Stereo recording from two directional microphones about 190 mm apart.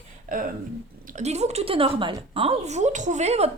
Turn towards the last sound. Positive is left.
turn(degrees=-35)  # may be behind; listen again after turning